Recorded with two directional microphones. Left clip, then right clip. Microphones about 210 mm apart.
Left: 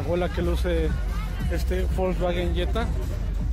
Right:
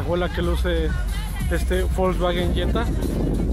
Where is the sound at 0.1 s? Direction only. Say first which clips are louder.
Right 2 dB; 5° left (ahead or behind).